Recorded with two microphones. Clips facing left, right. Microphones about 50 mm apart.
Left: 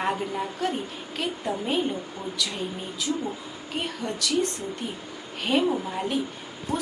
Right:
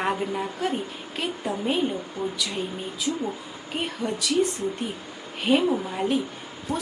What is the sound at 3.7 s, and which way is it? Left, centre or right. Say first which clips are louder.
Speech: right 1 dB; centre.